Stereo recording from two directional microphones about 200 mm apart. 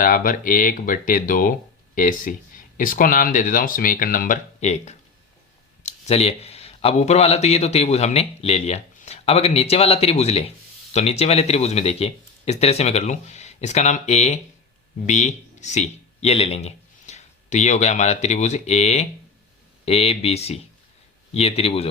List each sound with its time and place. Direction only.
0.0 s speech: 45° left (ahead or behind)